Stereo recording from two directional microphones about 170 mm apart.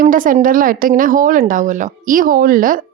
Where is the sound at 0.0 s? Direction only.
50° right (ahead or behind).